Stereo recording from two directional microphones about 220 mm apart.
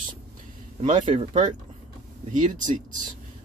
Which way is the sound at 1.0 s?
30° right (ahead or behind).